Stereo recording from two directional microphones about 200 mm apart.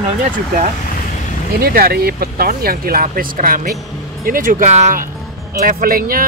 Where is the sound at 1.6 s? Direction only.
50° right (ahead or behind).